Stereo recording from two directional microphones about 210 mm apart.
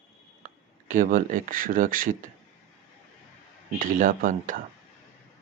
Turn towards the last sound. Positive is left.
turn(degrees=-40)  # may be behind; listen again after turning